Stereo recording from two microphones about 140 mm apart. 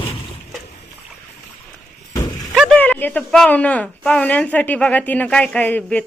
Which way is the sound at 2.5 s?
Centre (ahead or behind).